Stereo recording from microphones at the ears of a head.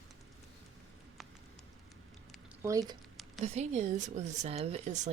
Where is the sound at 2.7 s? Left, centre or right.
Right.